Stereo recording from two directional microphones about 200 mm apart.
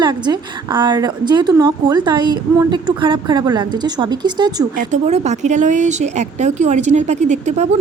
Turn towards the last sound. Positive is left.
turn(degrees=-35)  # may be behind; listen again after turning